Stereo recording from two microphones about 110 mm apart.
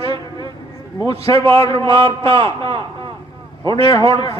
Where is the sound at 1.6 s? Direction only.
40° left (ahead or behind).